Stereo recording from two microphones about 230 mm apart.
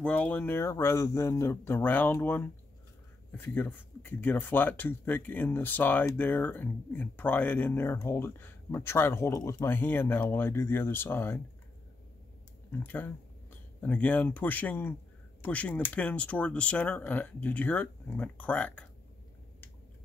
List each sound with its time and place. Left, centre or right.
0.0 s speech: centre
12.7 s speech: centre